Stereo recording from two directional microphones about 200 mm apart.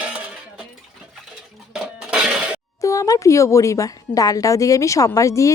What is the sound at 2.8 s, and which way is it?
A woman's voice, 15° left (ahead or behind).